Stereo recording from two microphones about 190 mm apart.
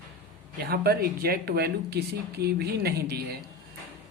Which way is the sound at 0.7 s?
55° right (ahead or behind).